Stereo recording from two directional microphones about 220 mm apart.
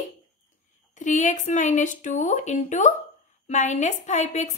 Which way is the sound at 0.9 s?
35° left (ahead or behind).